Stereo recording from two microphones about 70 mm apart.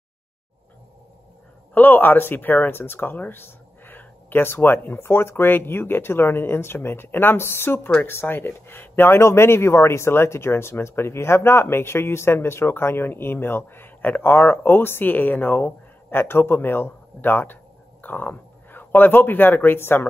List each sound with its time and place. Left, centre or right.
1.7 s speech: left